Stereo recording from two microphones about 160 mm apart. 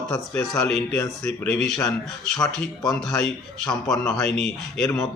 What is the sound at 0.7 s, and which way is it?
A man's voice, 5° left (ahead or behind).